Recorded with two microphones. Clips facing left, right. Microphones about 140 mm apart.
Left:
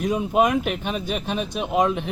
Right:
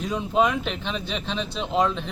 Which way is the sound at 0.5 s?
55° left (ahead or behind).